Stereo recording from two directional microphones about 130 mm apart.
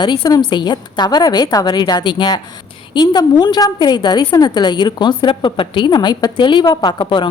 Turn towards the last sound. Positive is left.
turn(degrees=35)  # may be behind; listen again after turning